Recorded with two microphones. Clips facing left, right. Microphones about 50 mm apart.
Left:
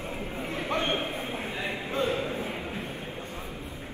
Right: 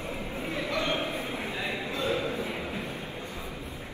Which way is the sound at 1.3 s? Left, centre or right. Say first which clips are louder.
Even; centre.